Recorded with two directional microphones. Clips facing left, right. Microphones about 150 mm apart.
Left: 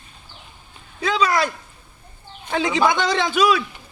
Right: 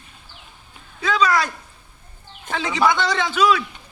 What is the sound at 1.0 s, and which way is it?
Speech, 15° left (ahead or behind).